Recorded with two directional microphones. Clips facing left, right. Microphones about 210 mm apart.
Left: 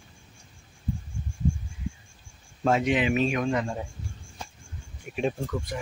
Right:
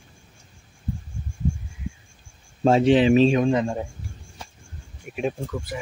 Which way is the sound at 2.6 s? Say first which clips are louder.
Right 7 dB; 30° right (ahead or behind).